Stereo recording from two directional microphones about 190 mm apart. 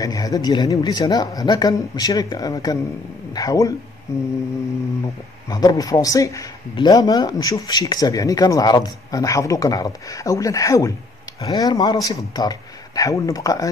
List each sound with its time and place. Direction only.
0.0 s a man's voice: 20° left (ahead or behind)
5.5 s a man's voice: 20° left (ahead or behind)